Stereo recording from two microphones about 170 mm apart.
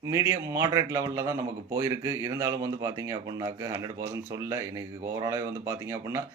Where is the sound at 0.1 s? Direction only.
20° right (ahead or behind).